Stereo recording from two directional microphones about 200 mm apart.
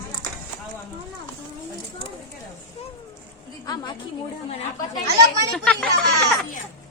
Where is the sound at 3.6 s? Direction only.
20° left (ahead or behind).